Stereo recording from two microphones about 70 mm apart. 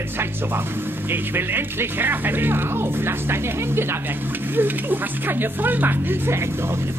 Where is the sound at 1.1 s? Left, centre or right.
Right.